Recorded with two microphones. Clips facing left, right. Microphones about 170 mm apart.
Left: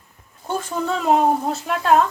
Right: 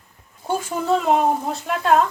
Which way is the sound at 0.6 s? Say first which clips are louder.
Even; 10° right (ahead or behind).